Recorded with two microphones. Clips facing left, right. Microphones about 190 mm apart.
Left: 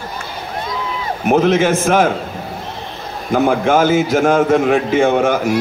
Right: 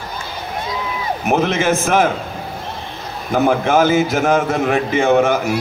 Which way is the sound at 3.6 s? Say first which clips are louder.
Left 1 dB; 45° left (ahead or behind).